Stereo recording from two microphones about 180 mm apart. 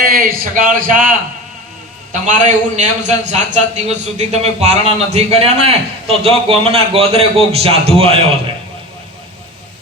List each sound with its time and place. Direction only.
0.0 s a man's voice: 55° right (ahead or behind)
2.1 s a man's voice: 45° right (ahead or behind)